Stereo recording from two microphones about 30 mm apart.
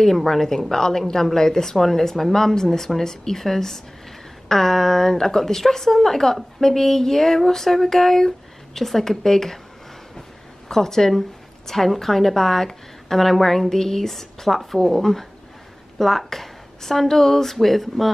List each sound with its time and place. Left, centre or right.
0.0 s a woman's voice: centre
10.7 s a woman's voice: centre